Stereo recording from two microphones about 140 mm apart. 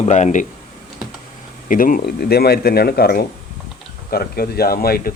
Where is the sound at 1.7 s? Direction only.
75° left (ahead or behind).